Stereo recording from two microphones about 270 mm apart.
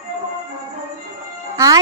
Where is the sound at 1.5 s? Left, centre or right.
Centre.